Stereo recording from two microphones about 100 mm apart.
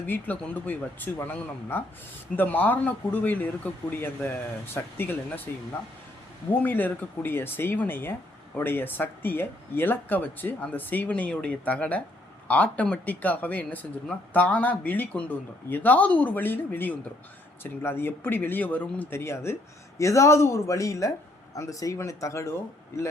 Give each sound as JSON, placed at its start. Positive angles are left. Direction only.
{"t": 0.0, "sound": "speech", "side_deg": 15}
{"t": 4.7, "sound": "speech", "side_deg": 20}
{"t": 6.5, "sound": "speech", "side_deg": 20}